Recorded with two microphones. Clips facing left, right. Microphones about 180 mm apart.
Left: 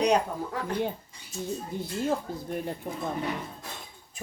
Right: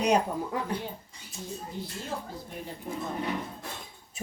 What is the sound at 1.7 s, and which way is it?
Speech, 50° left (ahead or behind).